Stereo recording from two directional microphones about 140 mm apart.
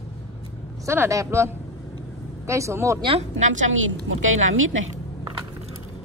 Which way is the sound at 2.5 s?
20° right (ahead or behind).